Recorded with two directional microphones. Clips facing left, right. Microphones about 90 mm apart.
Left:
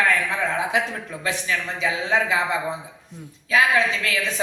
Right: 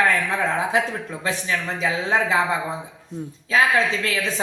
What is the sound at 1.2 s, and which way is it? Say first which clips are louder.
A woman's voice: right 1 dB; 30° right (ahead or behind).